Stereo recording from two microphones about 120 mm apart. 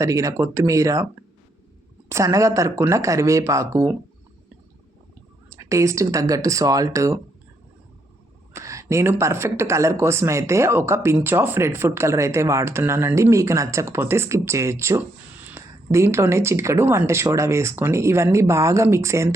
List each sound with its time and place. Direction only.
0.0 s speech: 25° right (ahead or behind)
2.0 s speech: 25° right (ahead or behind)
5.5 s speech: 25° right (ahead or behind)
8.5 s speech: 25° right (ahead or behind)